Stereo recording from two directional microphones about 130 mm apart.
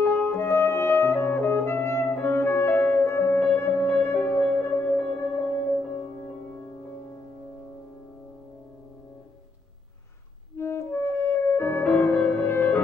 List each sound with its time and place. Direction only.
0.0 s music: 20° left (ahead or behind)
10.6 s music: 20° left (ahead or behind)